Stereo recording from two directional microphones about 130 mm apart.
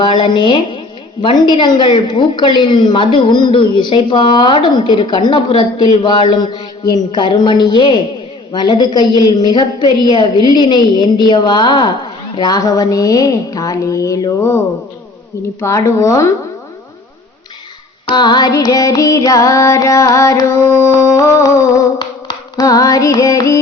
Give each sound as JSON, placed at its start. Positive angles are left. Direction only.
{"t": 0.0, "sound": "a woman's voice", "side_deg": 40}
{"t": 12.4, "sound": "music", "side_deg": 30}
{"t": 15.6, "sound": "music", "side_deg": 20}
{"t": 18.1, "sound": "music", "side_deg": 35}
{"t": 22.3, "sound": "a sound", "side_deg": 30}